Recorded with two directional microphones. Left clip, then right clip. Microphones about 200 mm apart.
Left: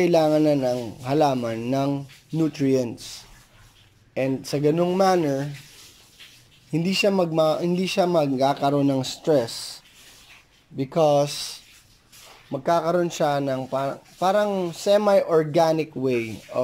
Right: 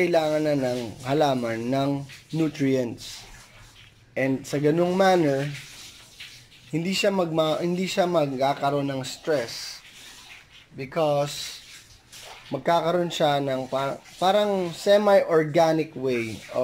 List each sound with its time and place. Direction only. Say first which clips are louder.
0.0 s speech: left 3 dB; 15° left (ahead or behind)
4.1 s speech: left 1 dB; 10° left (ahead or behind)
6.7 s speech: left 2 dB; 10° left (ahead or behind)
10.8 s speech: left 4 dB; 15° left (ahead or behind)